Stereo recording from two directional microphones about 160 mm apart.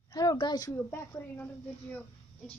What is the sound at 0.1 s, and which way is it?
A woman's voice, 25° left (ahead or behind).